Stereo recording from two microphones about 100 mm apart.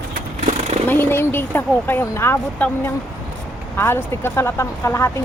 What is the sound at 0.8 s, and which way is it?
Speech, 20° left (ahead or behind).